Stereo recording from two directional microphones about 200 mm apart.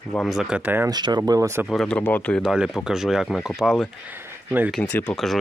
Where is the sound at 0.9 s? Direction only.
20° right (ahead or behind).